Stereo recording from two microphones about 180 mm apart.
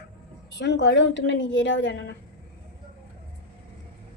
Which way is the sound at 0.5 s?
75° left (ahead or behind).